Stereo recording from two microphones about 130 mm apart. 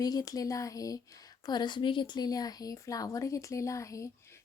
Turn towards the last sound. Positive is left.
turn(degrees=25)  # may be behind; listen again after turning